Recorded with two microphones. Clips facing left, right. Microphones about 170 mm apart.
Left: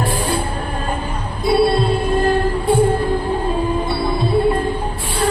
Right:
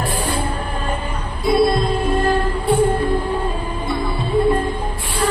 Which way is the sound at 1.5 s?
35° left (ahead or behind).